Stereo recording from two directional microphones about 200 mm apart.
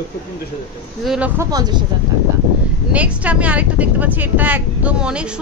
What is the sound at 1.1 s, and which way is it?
Speech, 5° right (ahead or behind).